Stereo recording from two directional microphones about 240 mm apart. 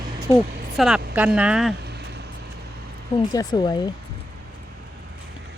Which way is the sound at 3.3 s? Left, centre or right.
Centre.